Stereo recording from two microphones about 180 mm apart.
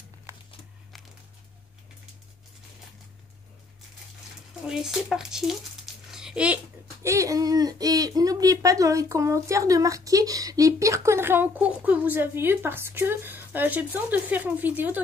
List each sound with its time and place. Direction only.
4.6 s a child's voice: centre (ahead or behind)